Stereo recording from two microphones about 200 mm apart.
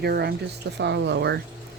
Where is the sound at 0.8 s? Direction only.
60° right (ahead or behind).